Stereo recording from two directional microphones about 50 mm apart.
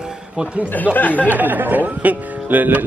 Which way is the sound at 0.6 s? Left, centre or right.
Left.